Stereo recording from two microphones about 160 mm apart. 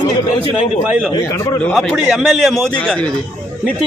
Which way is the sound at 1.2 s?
25° left (ahead or behind).